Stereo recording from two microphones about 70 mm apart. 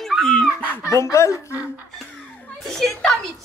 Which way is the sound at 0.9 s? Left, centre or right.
Left.